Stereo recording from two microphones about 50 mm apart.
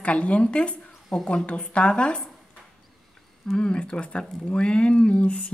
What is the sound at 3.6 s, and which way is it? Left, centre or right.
Speech, centre.